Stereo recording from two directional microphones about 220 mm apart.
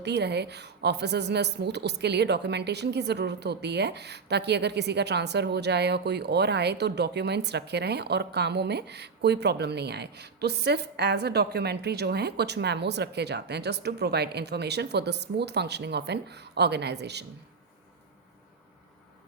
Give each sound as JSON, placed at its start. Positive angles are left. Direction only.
{"t": 0.0, "sound": "a woman's voice", "side_deg": -50}